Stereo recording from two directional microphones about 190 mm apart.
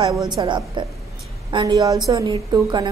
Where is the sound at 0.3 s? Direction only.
20° right (ahead or behind).